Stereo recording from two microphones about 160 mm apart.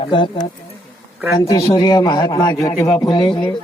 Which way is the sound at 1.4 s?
20° left (ahead or behind).